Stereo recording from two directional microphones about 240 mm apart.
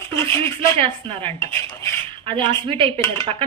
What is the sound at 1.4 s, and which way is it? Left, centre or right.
Dishes, centre.